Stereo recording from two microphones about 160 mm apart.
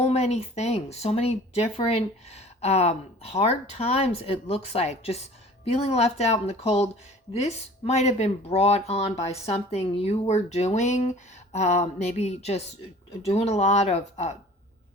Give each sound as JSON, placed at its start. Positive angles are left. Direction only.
{"t": 0.0, "sound": "speech", "side_deg": 40}
{"t": 11.5, "sound": "a sound", "side_deg": 45}
{"t": 13.2, "sound": "speech", "side_deg": 40}